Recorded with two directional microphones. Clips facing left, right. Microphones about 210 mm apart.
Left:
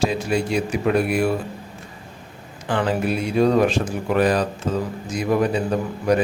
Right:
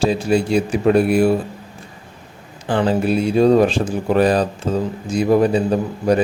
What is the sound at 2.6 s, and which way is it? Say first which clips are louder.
A man's voice: right 4 dB; 30° right (ahead or behind).